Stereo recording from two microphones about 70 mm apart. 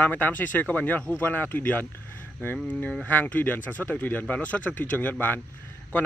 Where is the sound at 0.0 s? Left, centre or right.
Left.